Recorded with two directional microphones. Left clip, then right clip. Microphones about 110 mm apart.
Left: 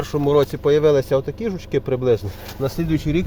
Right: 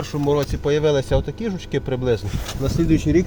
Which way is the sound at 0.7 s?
20° left (ahead or behind).